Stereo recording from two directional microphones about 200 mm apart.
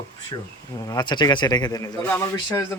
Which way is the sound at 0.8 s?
20° left (ahead or behind).